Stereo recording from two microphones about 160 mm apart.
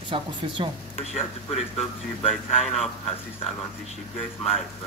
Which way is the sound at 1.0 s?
40° left (ahead or behind).